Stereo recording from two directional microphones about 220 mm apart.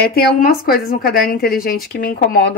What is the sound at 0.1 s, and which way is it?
A woman's voice, 40° left (ahead or behind).